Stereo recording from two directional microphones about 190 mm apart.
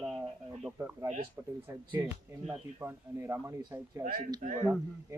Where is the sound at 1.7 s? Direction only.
20° right (ahead or behind).